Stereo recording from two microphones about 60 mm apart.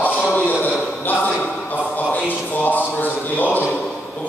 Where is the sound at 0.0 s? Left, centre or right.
Left.